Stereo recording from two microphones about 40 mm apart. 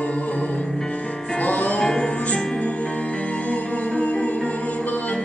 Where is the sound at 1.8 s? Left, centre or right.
Left.